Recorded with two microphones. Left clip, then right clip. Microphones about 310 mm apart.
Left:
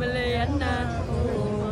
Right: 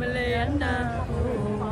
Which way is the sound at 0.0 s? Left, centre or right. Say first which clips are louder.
Even; centre.